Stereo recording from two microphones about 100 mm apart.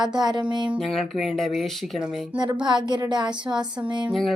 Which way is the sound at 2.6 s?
50° right (ahead or behind).